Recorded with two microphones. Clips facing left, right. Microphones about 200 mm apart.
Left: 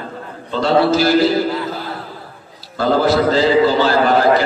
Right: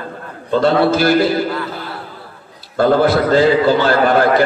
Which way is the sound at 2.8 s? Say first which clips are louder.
Right 2 dB; 55° right (ahead or behind).